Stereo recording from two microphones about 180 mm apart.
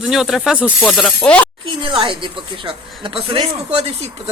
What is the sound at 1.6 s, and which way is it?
Speech, 30° right (ahead or behind).